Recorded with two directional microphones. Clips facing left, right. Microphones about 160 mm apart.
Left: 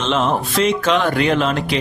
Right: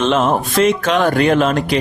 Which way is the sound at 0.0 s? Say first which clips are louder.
Right 4 dB; 50° right (ahead or behind).